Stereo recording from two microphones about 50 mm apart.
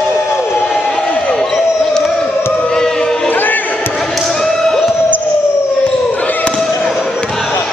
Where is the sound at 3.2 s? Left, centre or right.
Left.